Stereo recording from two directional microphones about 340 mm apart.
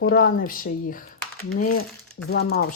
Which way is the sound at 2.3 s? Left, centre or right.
Left.